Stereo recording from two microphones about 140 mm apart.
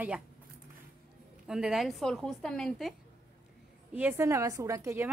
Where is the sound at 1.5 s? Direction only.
5° right (ahead or behind).